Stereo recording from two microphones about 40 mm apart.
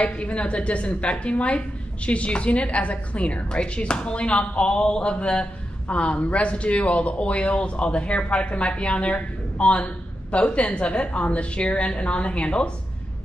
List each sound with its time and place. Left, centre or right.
0.0 s a woman's voice: left